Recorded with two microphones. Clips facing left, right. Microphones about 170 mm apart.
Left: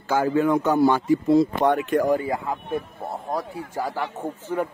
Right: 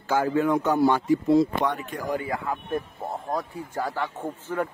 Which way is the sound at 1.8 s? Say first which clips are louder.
Left 12 dB; 75° left (ahead or behind).